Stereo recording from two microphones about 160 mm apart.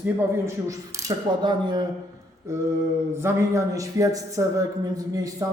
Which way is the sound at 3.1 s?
15° right (ahead or behind).